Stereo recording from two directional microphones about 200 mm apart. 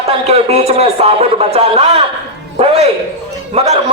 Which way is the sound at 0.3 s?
30° right (ahead or behind).